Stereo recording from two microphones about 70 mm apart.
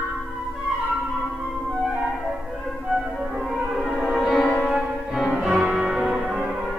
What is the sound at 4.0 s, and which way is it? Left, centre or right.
Music, centre.